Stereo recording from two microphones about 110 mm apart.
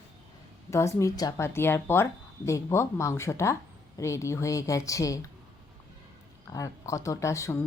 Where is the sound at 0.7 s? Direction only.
25° left (ahead or behind).